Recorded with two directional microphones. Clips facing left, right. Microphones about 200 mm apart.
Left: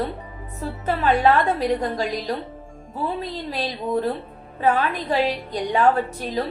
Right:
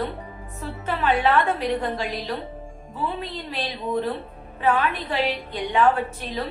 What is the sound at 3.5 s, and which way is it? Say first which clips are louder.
A woman's voice: left 2 dB; 40° left (ahead or behind).